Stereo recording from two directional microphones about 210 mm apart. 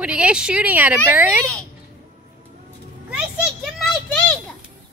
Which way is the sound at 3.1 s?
5° right (ahead or behind).